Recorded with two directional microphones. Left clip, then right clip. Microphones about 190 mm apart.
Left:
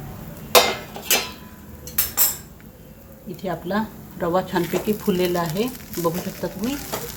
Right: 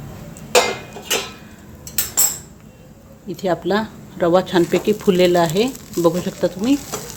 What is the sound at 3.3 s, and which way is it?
A woman's voice, 55° right (ahead or behind).